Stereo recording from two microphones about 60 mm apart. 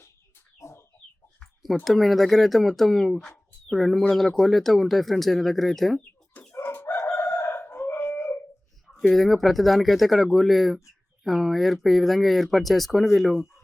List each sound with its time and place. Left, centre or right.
0.6 s chicken: left
1.8 s speech: centre
6.5 s chicken: left
7.0 s crowing: left
8.9 s speech: centre